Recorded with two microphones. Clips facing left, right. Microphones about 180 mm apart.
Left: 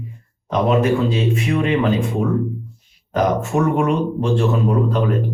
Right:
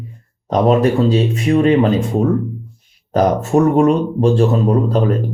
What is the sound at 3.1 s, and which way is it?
Speech, 35° right (ahead or behind).